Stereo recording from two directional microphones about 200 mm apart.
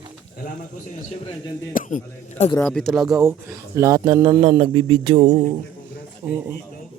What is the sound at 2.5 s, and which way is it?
Speech, 5° left (ahead or behind).